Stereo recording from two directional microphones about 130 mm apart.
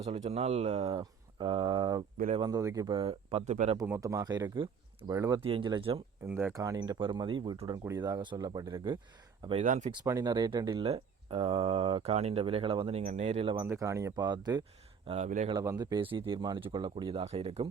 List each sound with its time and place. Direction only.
0.0 s speech: 50° right (ahead or behind); by 3.0 s 30° right (ahead or behind)
3.0 s speech: 50° right (ahead or behind)
3.8 s speech: 25° right (ahead or behind)
5.4 s speech: 45° right (ahead or behind)
6.2 s speech: 20° right (ahead or behind); by 9.0 s 35° right (ahead or behind)
9.6 s speech: 70° right (ahead or behind)
9.9 s speech: 30° right (ahead or behind)
10.8 s speech: 50° right (ahead or behind)
13.6 s speech: 25° right (ahead or behind)
15.0 s speech: 55° right (ahead or behind)
16.0 s speech: 40° right (ahead or behind)